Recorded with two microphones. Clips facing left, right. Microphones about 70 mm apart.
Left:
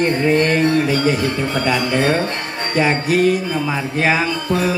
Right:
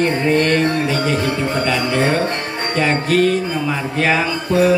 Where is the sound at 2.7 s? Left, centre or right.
Centre.